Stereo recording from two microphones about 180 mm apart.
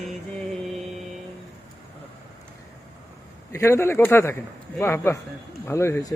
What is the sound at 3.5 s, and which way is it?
Speech, 15° left (ahead or behind).